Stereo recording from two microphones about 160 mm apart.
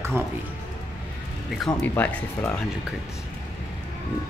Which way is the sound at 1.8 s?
10° left (ahead or behind).